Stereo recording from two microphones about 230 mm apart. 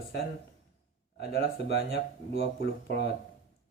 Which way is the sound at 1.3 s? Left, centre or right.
Left.